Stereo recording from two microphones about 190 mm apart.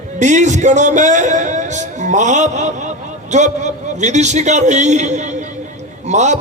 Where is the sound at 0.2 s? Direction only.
40° right (ahead or behind).